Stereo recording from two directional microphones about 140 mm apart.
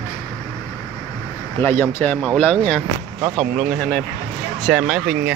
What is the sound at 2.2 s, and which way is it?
Speech, 5° left (ahead or behind).